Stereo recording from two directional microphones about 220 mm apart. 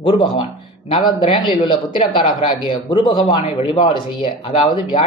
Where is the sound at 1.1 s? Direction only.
20° left (ahead or behind).